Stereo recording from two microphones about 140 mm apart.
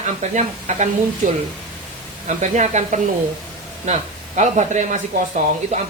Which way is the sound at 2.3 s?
60° right (ahead or behind).